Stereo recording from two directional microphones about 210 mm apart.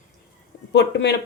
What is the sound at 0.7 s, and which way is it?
Speech, 55° left (ahead or behind).